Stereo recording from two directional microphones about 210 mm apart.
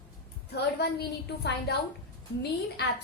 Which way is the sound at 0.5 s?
50° left (ahead or behind).